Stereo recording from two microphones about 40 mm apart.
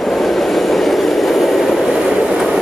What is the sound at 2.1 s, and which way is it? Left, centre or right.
Train, right.